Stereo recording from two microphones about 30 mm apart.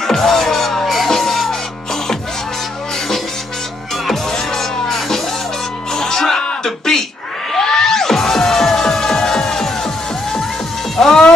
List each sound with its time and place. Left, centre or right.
0.0 s music: centre
4.1 s music: centre
6.6 s a sound: centre
7.5 s music: centre
11.0 s music: centre